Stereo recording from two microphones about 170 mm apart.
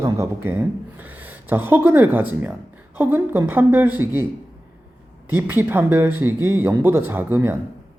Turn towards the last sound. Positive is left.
turn(degrees=-15)  # may be behind; listen again after turning